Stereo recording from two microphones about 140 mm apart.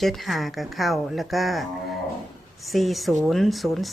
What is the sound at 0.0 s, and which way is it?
Speech, centre (ahead or behind).